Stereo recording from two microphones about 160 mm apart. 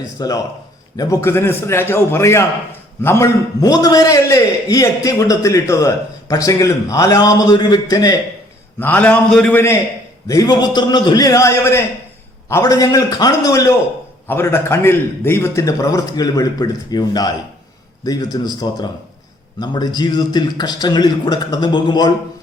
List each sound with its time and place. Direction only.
0.2 s a man's voice: 20° left (ahead or behind)
10.2 s a man's voice: 25° left (ahead or behind)